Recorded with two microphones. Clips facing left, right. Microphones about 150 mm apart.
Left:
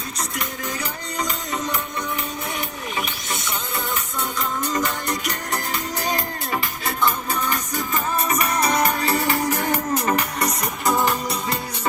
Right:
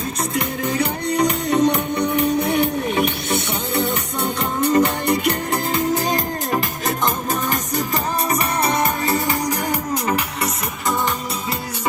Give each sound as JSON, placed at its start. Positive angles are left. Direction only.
{"t": 0.8, "sound": "music", "side_deg": -65}